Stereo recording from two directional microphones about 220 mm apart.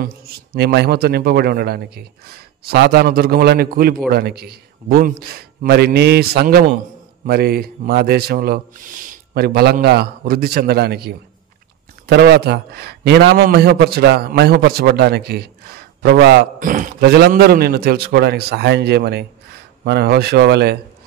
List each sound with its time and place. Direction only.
0.0 s a man's voice: 45° right (ahead or behind)